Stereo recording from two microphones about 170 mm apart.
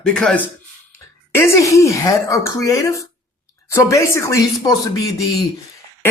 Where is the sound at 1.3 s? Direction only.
15° left (ahead or behind).